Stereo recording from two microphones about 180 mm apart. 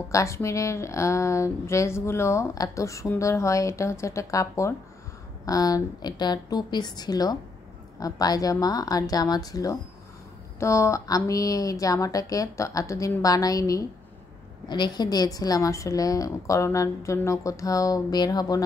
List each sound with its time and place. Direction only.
0.1 s a woman's voice: 15° left (ahead or behind)